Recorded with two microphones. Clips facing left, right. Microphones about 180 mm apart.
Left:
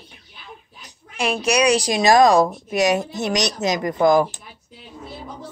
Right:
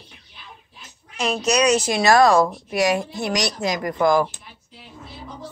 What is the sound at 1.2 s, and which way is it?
A woman's voice, 10° left (ahead or behind).